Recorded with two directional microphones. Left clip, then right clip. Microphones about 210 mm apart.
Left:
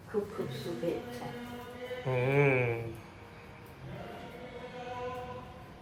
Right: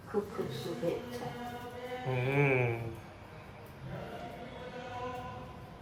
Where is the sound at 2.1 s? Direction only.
5° right (ahead or behind).